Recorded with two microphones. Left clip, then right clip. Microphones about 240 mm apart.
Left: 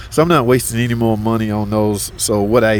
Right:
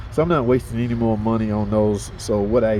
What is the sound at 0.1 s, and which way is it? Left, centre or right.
Speech, left.